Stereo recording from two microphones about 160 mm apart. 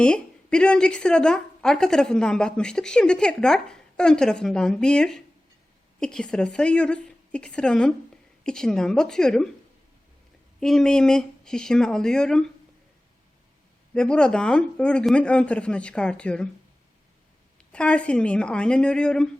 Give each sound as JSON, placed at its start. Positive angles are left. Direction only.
{"t": 0.0, "sound": "a woman's voice", "side_deg": 5}
{"t": 10.6, "sound": "a woman's voice", "side_deg": 5}
{"t": 13.9, "sound": "a man's voice", "side_deg": 5}
{"t": 17.7, "sound": "a man's voice", "side_deg": 5}